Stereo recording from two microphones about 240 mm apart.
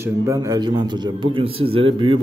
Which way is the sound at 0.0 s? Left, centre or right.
Centre.